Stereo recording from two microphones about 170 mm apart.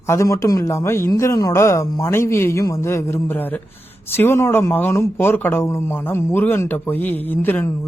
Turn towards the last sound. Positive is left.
turn(degrees=10)  # may be behind; listen again after turning